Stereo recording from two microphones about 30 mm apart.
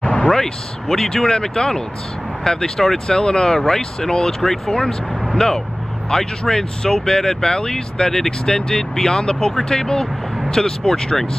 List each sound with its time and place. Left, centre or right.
0.3 s speech: centre
2.8 s speech: centre
3.2 s speech: left
4.6 s speech: left
5.4 s speech: centre
8.9 s speech: centre